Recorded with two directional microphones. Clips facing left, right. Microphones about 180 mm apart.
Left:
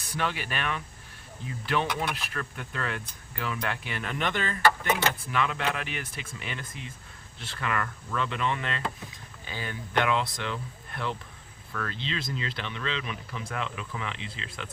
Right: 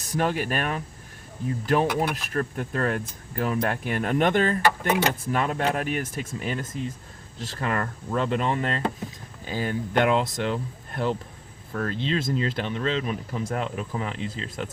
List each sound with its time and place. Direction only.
0.0 s speech: 45° right (ahead or behind)